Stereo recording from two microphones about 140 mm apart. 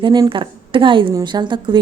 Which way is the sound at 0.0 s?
35° right (ahead or behind).